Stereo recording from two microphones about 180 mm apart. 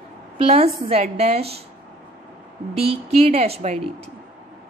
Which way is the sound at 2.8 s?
35° right (ahead or behind).